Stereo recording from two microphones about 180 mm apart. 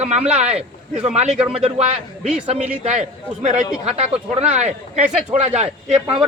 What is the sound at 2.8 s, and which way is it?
Speech, 40° right (ahead or behind).